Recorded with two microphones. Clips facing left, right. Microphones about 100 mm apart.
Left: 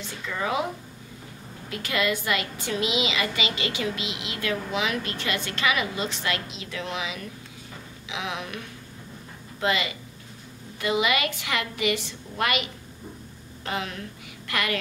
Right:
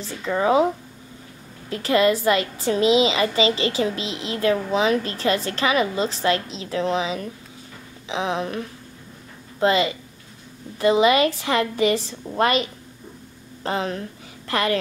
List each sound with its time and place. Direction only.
0.0 s a woman's voice: 35° right (ahead or behind)
1.7 s a woman's voice: 35° right (ahead or behind)
13.7 s a woman's voice: 35° right (ahead or behind)